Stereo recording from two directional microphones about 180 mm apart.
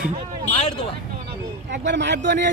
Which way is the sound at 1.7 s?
75° right (ahead or behind).